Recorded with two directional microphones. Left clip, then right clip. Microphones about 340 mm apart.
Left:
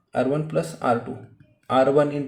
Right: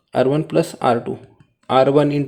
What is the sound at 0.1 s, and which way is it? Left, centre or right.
A man's voice, right.